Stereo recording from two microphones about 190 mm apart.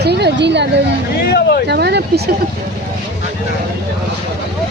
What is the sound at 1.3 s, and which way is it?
Speech, 60° left (ahead or behind).